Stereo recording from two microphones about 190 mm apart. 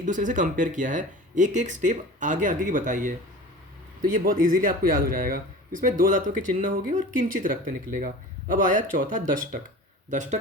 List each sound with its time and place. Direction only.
0.0 s speech: 40° right (ahead or behind)